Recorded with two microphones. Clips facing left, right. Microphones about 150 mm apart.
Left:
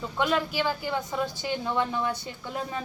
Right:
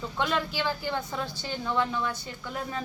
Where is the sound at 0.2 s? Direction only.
5° left (ahead or behind).